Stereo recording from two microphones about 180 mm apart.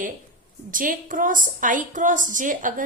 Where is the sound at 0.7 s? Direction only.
50° right (ahead or behind).